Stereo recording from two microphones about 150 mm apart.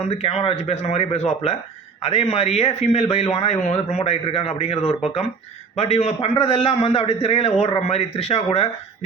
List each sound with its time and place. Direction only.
0.0 s a man's voice: 45° left (ahead or behind)